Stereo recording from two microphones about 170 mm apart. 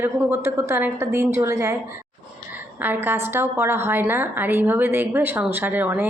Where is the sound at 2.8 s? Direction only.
10° right (ahead or behind).